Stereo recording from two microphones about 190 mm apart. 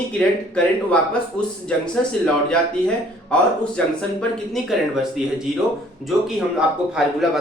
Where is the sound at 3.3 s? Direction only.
5° left (ahead or behind).